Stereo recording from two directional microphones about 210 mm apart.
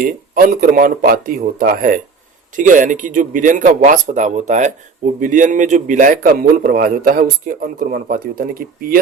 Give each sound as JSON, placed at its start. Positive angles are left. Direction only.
{"t": 0.0, "sound": "a man's voice", "side_deg": -40}